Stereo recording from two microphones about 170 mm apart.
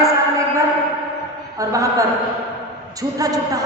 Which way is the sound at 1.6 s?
20° right (ahead or behind).